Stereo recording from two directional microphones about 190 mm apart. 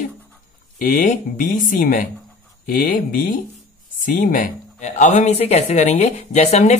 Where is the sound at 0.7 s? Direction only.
45° left (ahead or behind).